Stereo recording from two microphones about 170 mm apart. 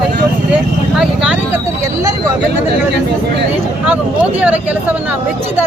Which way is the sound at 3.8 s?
10° right (ahead or behind).